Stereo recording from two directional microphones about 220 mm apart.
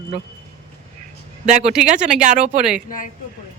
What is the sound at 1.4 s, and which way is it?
Speech, 30° right (ahead or behind).